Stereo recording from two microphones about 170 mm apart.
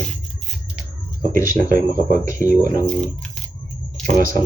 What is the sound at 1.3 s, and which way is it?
Speech, 15° left (ahead or behind).